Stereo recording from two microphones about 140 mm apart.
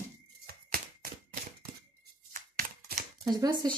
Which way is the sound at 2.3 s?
70° right (ahead or behind).